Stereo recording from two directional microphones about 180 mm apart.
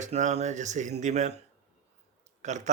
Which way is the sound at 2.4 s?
40° right (ahead or behind).